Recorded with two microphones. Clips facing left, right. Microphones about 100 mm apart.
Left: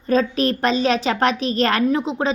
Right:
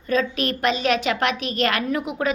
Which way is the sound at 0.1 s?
35° left (ahead or behind).